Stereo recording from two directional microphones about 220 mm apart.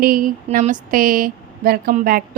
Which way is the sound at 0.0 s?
40° right (ahead or behind).